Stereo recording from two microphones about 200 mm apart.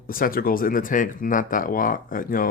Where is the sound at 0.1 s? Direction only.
45° left (ahead or behind).